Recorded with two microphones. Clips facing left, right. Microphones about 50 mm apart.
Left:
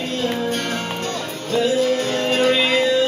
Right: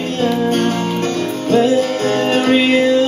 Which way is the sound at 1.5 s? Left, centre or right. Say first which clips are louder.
Right 4 dB; right.